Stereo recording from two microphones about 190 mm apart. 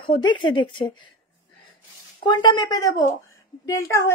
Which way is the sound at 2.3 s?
25° left (ahead or behind).